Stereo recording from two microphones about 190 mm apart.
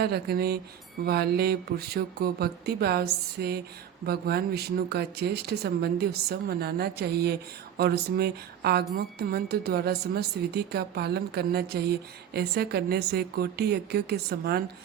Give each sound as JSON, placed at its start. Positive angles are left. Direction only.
{"t": 0.0, "sound": "a woman's voice", "side_deg": -55}